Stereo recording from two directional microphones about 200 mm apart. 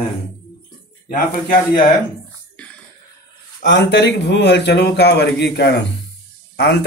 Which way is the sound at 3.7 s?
60° left (ahead or behind).